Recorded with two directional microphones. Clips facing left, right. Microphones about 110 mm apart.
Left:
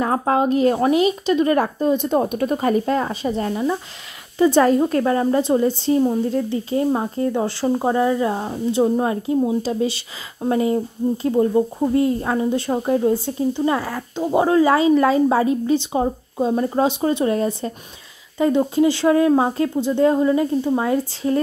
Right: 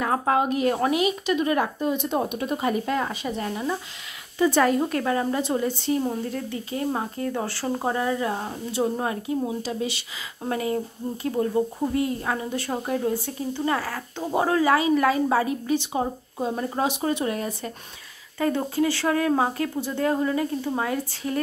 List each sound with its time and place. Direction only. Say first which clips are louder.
0.0 s speech: left 4 dB; 30° left (ahead or behind)